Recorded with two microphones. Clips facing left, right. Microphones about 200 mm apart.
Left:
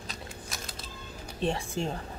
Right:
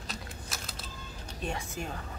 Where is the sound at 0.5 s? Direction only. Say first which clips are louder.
Even; centre (ahead or behind).